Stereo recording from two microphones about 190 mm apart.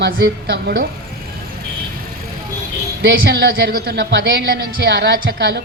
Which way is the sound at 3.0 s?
55° right (ahead or behind).